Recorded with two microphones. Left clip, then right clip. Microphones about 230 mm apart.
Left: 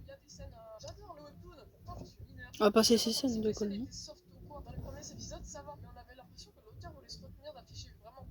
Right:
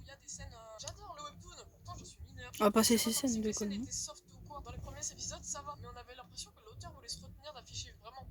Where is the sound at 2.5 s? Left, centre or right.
Right.